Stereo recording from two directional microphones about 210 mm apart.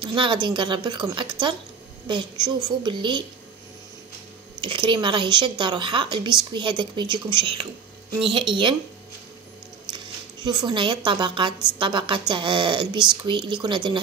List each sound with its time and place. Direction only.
0.0 s a woman's voice: 25° right (ahead or behind)
4.6 s a woman's voice: 25° right (ahead or behind)
9.9 s zipper: 20° right (ahead or behind)
11.1 s a woman's voice: 25° right (ahead or behind)